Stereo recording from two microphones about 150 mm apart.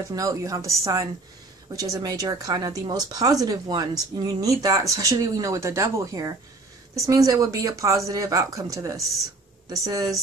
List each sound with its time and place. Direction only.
0.1 s speech: 25° right (ahead or behind)
1.8 s speech: 25° right (ahead or behind)